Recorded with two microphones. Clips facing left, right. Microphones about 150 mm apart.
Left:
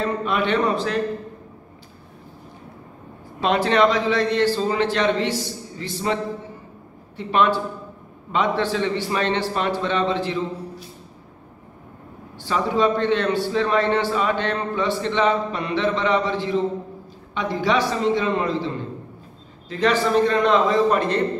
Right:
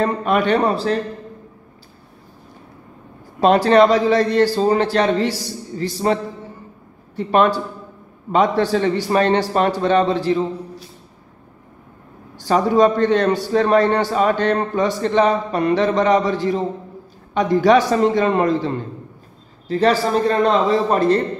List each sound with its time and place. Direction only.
0.0 s a man's voice: 50° right (ahead or behind)
3.3 s a man's voice: 40° right (ahead or behind)
7.2 s a man's voice: 45° right (ahead or behind)
12.4 s a man's voice: 40° right (ahead or behind)
19.7 s a man's voice: 35° right (ahead or behind)